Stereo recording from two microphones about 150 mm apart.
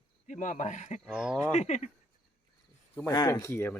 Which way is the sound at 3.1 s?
20° left (ahead or behind).